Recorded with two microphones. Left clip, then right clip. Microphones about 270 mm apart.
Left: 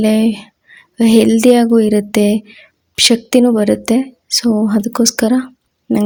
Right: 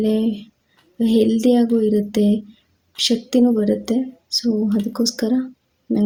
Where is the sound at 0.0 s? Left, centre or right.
Left.